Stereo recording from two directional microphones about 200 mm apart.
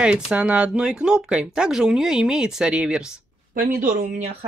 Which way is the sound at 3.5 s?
45° right (ahead or behind).